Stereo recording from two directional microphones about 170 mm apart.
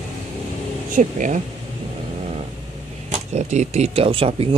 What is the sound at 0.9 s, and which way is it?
Speech, 50° right (ahead or behind).